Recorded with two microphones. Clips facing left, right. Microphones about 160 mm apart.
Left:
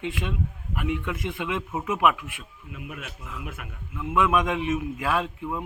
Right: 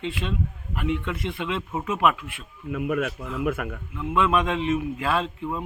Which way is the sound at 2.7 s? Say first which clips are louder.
Right 13 dB; 55° right (ahead or behind).